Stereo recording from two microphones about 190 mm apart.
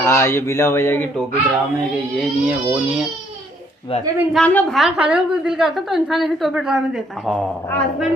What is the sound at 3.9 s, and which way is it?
Speech, 30° left (ahead or behind).